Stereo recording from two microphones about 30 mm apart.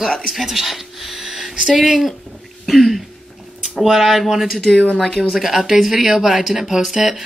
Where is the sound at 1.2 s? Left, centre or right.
Centre.